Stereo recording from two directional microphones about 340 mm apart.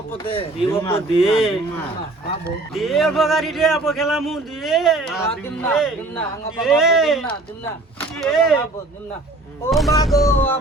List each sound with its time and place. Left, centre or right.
0.3 s speech: centre
1.2 s speech: centre
2.7 s speech: centre
9.6 s speech: centre